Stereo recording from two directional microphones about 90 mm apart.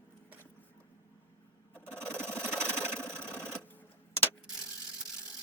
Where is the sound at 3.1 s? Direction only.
25° right (ahead or behind).